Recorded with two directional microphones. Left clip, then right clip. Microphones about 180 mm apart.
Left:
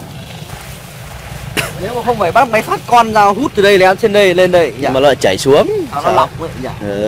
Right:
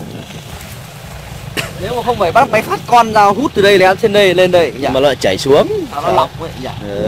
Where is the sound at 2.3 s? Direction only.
20° left (ahead or behind).